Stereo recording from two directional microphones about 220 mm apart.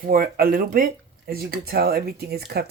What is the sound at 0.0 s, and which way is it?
Speech, 40° right (ahead or behind).